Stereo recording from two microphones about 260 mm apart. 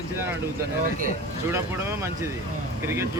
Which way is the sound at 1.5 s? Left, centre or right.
Centre.